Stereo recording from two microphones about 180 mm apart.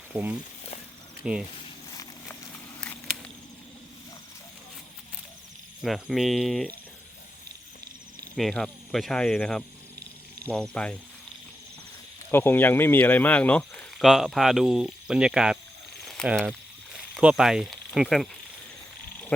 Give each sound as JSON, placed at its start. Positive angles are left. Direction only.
{"t": 0.1, "sound": "speech", "side_deg": -10}
{"t": 1.9, "sound": "clip-clop", "side_deg": 20}
{"t": 2.5, "sound": "a sound", "side_deg": 5}
{"t": 5.8, "sound": "speech", "side_deg": 0}
{"t": 8.4, "sound": "speech", "side_deg": 0}
{"t": 12.3, "sound": "speech", "side_deg": 10}